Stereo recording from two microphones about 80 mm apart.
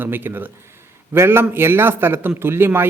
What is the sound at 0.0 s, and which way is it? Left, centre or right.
Speech, right.